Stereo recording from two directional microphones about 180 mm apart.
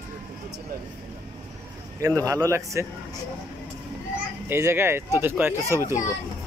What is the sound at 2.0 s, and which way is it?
Speech, 20° right (ahead or behind).